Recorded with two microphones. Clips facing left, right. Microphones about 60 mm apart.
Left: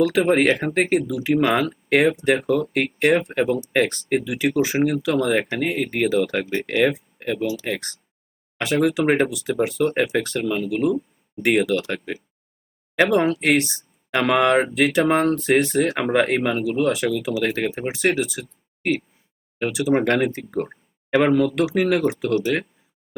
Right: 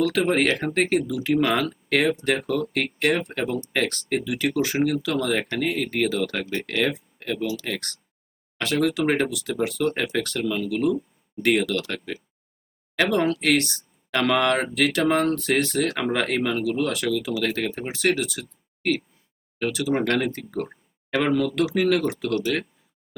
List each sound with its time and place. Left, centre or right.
0.0 s speech: centre
2.1 s speech: centre
3.3 s speech: centre
6.2 s speech: centre
6.6 s speech: centre
11.4 s speech: centre